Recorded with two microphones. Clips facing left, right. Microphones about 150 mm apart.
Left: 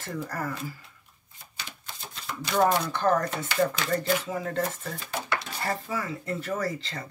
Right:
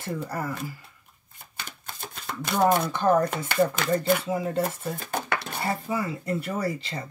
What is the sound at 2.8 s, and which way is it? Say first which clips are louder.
Speech: right 3 dB; 10° right (ahead or behind).